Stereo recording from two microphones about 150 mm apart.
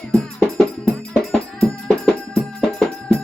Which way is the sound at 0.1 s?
5° left (ahead or behind).